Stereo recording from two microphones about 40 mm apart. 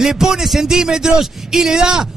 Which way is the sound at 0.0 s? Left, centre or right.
Centre.